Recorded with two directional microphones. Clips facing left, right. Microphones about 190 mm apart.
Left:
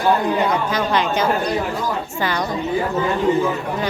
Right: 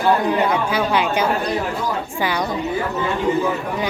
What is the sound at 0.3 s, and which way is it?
Speech, 10° right (ahead or behind).